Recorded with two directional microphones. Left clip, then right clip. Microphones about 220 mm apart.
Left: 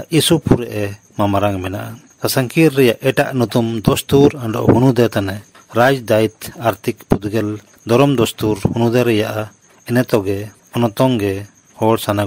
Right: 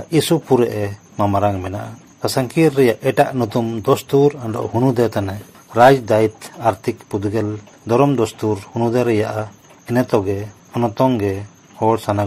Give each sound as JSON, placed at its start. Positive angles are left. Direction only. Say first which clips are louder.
{"t": 0.1, "sound": "speech", "louder": "left 1 dB", "side_deg": 55}